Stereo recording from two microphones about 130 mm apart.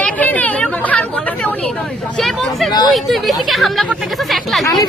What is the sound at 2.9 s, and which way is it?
Speech, centre (ahead or behind).